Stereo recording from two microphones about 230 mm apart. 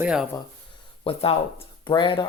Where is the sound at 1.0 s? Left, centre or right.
Left.